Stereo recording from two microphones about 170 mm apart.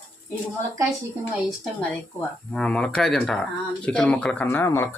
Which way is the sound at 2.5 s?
5° left (ahead or behind).